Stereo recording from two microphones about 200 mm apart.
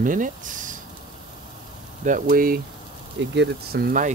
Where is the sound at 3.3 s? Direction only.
55° right (ahead or behind).